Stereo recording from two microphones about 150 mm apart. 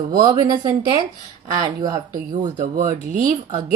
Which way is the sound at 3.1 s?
60° right (ahead or behind).